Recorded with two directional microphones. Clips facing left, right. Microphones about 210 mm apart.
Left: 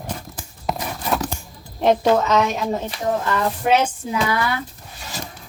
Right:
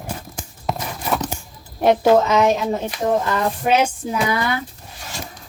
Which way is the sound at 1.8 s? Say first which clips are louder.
Right 2 dB; 10° right (ahead or behind).